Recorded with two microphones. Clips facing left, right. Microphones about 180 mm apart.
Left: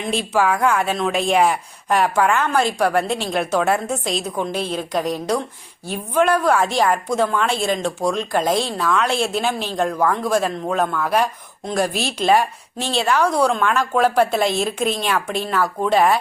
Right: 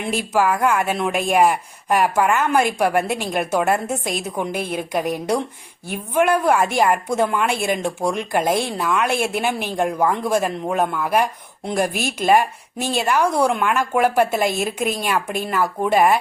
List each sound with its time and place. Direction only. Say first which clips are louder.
0.0 s speech: even; 10° right (ahead or behind)